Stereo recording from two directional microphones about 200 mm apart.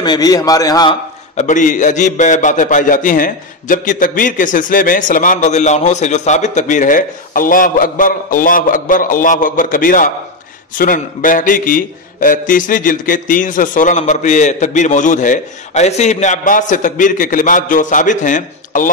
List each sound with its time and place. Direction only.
0.0 s a man's voice: 20° left (ahead or behind)
1.3 s a man's voice: 35° left (ahead or behind)